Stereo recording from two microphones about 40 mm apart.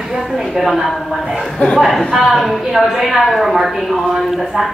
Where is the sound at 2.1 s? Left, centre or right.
Centre.